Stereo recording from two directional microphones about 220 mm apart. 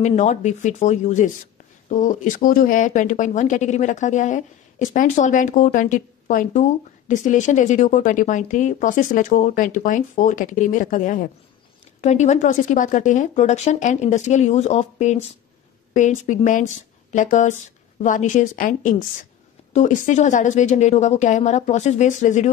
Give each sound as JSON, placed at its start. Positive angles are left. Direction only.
{"t": 0.0, "sound": "speech", "side_deg": 30}